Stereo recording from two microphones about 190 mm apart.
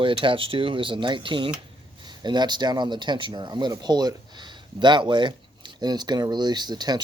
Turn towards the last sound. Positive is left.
turn(degrees=-20)  # may be behind; listen again after turning